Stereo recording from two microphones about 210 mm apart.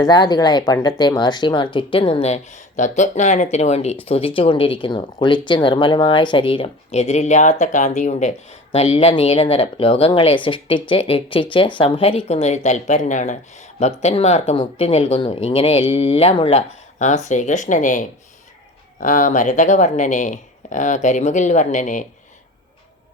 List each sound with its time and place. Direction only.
0.0 s speech: 20° left (ahead or behind); by 22.0 s 35° left (ahead or behind)